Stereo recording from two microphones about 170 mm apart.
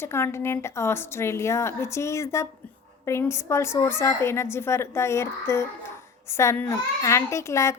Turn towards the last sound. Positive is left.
turn(degrees=15)  # may be behind; listen again after turning